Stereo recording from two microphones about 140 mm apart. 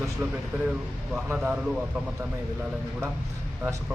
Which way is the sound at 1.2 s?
10° right (ahead or behind).